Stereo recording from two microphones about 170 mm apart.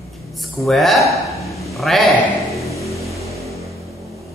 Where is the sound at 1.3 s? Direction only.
20° left (ahead or behind).